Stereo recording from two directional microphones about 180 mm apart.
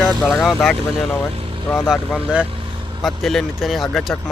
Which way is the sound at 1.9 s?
5° right (ahead or behind).